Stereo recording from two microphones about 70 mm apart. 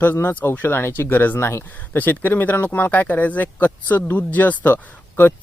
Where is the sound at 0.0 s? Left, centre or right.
Left.